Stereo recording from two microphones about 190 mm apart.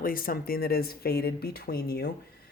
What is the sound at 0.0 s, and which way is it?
Speech, 50° left (ahead or behind).